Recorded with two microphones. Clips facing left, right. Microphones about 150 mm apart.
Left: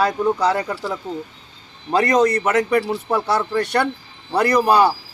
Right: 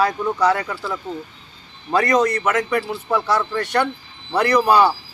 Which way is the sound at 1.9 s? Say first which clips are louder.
Left 1 dB; 30° left (ahead or behind).